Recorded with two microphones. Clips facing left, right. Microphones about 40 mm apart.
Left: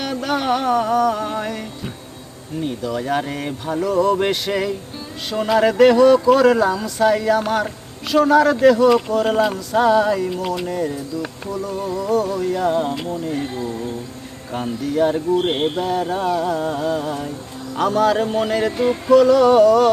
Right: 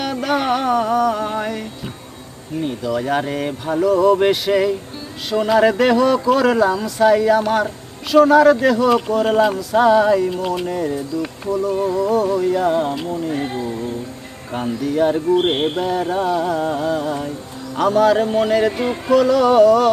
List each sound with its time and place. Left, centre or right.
0.0 s music: centre
2.6 s speech: centre
13.4 s speech: right
14.5 s speech: centre